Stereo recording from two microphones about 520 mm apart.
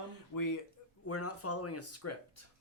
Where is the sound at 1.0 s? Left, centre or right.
Left.